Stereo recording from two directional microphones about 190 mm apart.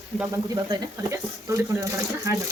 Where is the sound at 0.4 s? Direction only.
20° right (ahead or behind).